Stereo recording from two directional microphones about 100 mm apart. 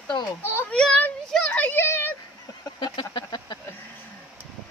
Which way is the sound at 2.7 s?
50° left (ahead or behind).